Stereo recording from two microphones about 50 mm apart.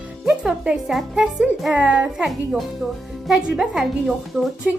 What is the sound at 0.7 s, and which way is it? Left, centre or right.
Speech, right.